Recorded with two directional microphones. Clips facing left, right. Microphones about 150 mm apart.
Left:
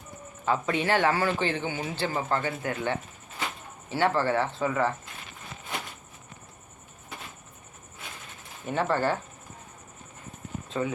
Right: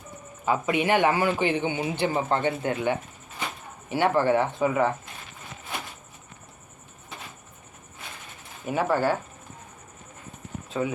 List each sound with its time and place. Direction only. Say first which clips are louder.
0.4 s a man's voice: right 2 dB; 10° right (ahead or behind)
8.6 s a man's voice: right 2 dB; 10° right (ahead or behind)
10.7 s a man's voice: right 2 dB; 5° right (ahead or behind)